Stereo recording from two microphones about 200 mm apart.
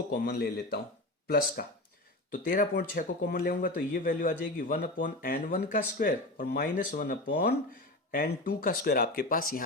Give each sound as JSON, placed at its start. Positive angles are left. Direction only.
{"t": 0.1, "sound": "a man's voice", "side_deg": 50}